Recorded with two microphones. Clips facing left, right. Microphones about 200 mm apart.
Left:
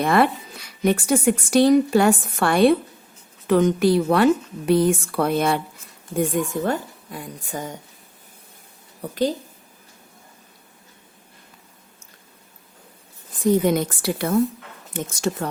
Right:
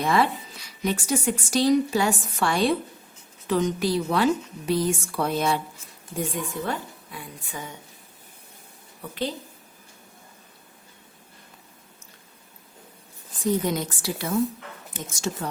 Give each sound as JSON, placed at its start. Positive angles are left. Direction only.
{"t": 0.0, "sound": "a woman's voice", "side_deg": 55}
{"t": 9.0, "sound": "a woman's voice", "side_deg": 40}
{"t": 13.7, "sound": "a woman's voice", "side_deg": 60}